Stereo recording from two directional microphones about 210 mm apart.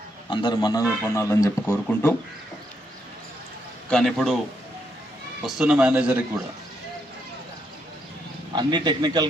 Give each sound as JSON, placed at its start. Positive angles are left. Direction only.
{"t": 0.3, "sound": "a man's voice", "side_deg": 20}
{"t": 3.8, "sound": "a man's voice", "side_deg": 0}
{"t": 5.5, "sound": "a man's voice", "side_deg": -5}
{"t": 8.5, "sound": "a man's voice", "side_deg": -20}